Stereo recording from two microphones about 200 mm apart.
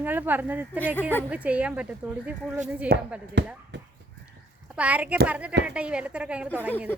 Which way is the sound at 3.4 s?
60° right (ahead or behind).